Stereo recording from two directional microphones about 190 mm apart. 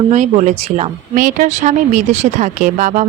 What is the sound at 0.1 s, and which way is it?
Speech, 40° right (ahead or behind).